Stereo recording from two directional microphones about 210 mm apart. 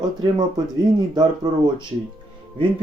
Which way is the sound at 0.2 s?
20° right (ahead or behind).